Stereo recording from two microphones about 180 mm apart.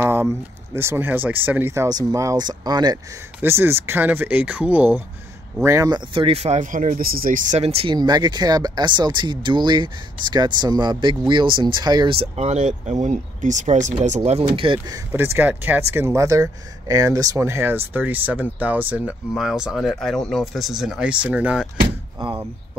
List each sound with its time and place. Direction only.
0.0 s speech: 15° right (ahead or behind); by 15.0 s 30° right (ahead or behind)
15.1 s speech: 10° right (ahead or behind)